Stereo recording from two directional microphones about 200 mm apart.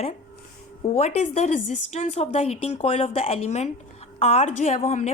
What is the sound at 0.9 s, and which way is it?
A woman's voice, 30° left (ahead or behind).